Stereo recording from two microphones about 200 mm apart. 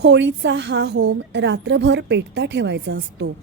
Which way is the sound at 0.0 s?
60° right (ahead or behind).